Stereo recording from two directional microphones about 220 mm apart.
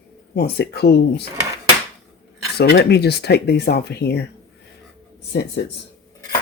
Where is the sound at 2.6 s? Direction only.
50° left (ahead or behind).